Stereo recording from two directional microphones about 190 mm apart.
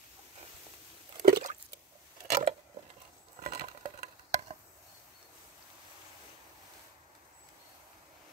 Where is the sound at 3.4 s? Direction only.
35° right (ahead or behind).